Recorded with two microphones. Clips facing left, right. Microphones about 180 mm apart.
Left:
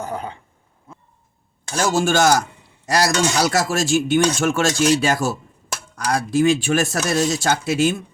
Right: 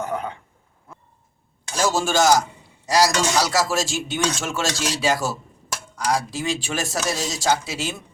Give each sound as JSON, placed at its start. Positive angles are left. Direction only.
{"t": 0.0, "sound": "speech", "side_deg": 35}
{"t": 1.7, "sound": "speech", "side_deg": 55}